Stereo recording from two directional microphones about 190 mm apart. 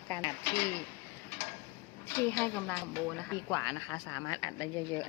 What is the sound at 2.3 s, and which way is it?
Speech, 10° left (ahead or behind).